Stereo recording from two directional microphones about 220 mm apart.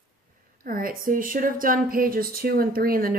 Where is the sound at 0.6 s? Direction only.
40° right (ahead or behind).